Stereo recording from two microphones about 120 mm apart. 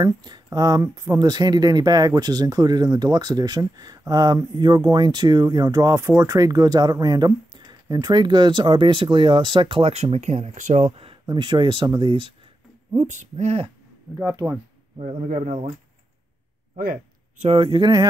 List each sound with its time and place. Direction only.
0.0 s speech: 35° right (ahead or behind)
10.1 s speech: 65° right (ahead or behind)
11.2 s speech: 40° right (ahead or behind)
12.9 s speech: 80° right; by 13.7 s 65° right (ahead or behind)
14.1 s speech: centre (ahead or behind)
15.0 s speech: 65° right (ahead or behind)
17.6 s speech: 40° right (ahead or behind)